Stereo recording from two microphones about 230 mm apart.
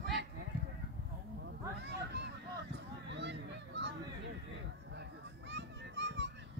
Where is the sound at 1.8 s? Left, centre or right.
Right.